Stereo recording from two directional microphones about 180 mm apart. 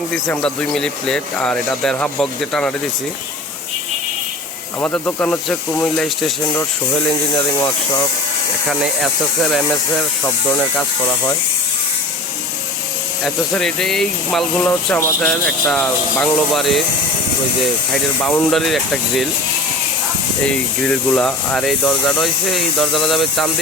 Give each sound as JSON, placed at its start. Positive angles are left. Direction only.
{"t": 0.1, "sound": "speech", "side_deg": 5}
{"t": 4.8, "sound": "speech", "side_deg": 10}
{"t": 6.5, "sound": "speech", "side_deg": 15}
{"t": 8.7, "sound": "speech", "side_deg": 0}
{"t": 13.2, "sound": "speech", "side_deg": 0}
{"t": 17.9, "sound": "speech", "side_deg": 10}
{"t": 20.4, "sound": "speech", "side_deg": 5}